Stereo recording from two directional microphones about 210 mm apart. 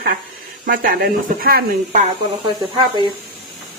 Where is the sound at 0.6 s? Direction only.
45° right (ahead or behind).